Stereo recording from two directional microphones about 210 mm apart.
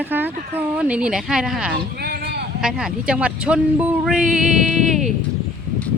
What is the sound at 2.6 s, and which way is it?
Speech, 5° right (ahead or behind).